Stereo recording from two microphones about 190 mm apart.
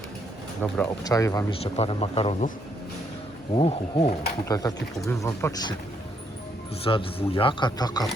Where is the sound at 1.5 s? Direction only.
30° left (ahead or behind).